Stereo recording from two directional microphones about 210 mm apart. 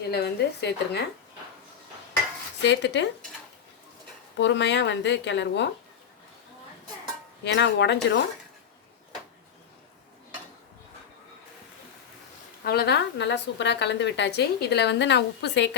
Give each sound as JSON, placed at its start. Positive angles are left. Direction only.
{"t": 0.1, "sound": "a woman's voice", "side_deg": 50}
{"t": 2.6, "sound": "a woman's voice", "side_deg": 55}
{"t": 4.4, "sound": "a woman's voice", "side_deg": 55}
{"t": 7.4, "sound": "a woman's voice", "side_deg": 55}
{"t": 12.6, "sound": "a woman's voice", "side_deg": 50}